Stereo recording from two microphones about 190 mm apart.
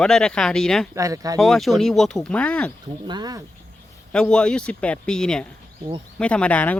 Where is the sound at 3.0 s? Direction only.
20° right (ahead or behind).